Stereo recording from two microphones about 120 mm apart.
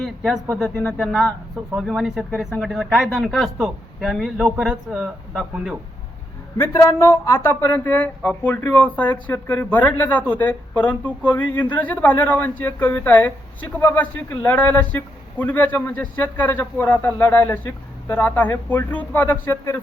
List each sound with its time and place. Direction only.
0.0 s speech: centre (ahead or behind)
0.8 s speech: 15° left (ahead or behind)
1.0 s a man's voice: centre (ahead or behind)
6.6 s speech: 25° left (ahead or behind)